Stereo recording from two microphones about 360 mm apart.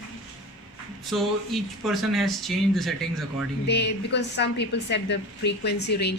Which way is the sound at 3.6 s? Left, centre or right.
Left.